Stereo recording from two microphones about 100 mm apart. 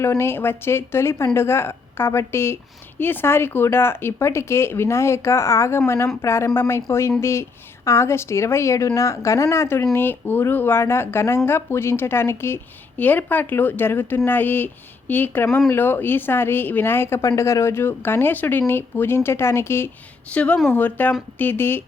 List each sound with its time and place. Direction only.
0.0 s speech: 25° left (ahead or behind)
20.3 s speech: 15° left (ahead or behind)